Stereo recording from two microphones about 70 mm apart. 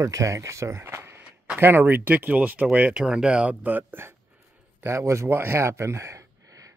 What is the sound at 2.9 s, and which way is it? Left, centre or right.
Speech, centre.